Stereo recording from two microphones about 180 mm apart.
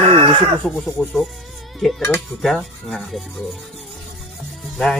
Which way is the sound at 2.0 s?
15° left (ahead or behind).